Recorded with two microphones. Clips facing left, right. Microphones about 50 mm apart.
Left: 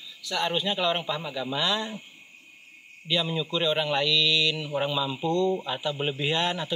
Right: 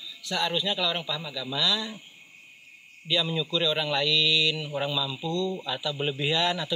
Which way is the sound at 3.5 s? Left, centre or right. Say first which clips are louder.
Left 1 dB; left.